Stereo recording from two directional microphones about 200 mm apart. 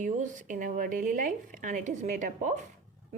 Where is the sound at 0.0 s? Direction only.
40° right (ahead or behind).